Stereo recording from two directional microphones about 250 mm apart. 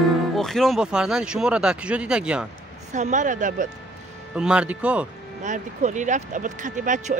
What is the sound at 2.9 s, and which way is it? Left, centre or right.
Speech, right.